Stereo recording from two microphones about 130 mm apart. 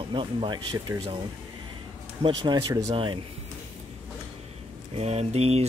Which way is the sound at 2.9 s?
40° right (ahead or behind).